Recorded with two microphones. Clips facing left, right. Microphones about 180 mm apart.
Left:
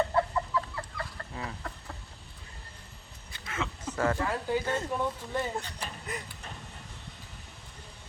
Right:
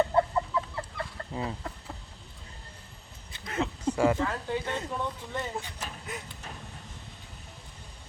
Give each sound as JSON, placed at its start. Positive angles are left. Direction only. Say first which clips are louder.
{"t": 0.1, "sound": "chicken", "louder": "right 2 dB", "side_deg": -20}
{"t": 3.4, "sound": "a sound", "louder": "right 6 dB", "side_deg": -35}
{"t": 3.9, "sound": "speech", "louder": "right 4 dB", "side_deg": -10}
{"t": 4.2, "sound": "speech", "louder": "left 1 dB", "side_deg": 5}
{"t": 5.8, "sound": "vehicle", "louder": "left 1 dB", "side_deg": 0}